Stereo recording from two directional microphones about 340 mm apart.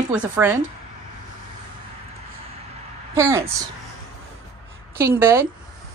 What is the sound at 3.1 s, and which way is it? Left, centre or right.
Speech, centre.